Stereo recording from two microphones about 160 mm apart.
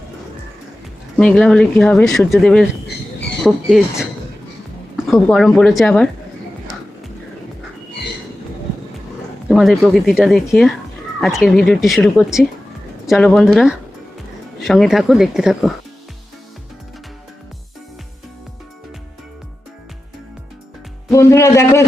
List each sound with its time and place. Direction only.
1.1 s speech: 5° left (ahead or behind)
5.0 s speech: centre (ahead or behind)
9.5 s speech: centre (ahead or behind)
21.1 s a man's voice: 20° left (ahead or behind)